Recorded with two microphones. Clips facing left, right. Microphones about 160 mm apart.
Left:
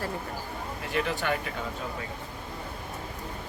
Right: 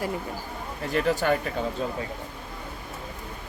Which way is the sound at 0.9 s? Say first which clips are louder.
Right 5 dB; 40° right (ahead or behind).